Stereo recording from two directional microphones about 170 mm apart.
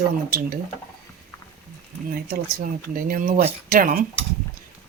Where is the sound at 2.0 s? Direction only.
55° right (ahead or behind).